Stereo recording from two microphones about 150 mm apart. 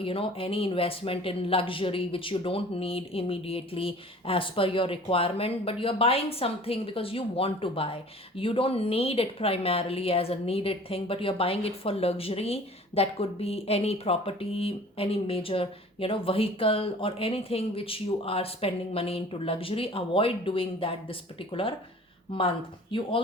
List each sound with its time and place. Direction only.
0.0 s a woman's voice: 40° left (ahead or behind)